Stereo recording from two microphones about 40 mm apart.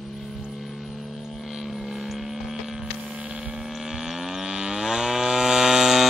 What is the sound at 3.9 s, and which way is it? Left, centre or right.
Livestock, centre.